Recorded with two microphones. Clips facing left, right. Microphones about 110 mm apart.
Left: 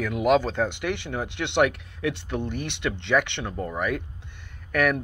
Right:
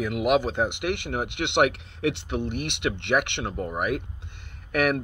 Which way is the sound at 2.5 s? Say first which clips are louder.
Right 1 dB; 60° right (ahead or behind).